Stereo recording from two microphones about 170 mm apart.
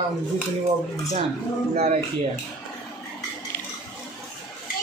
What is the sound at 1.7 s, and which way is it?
Speech, 40° right (ahead or behind).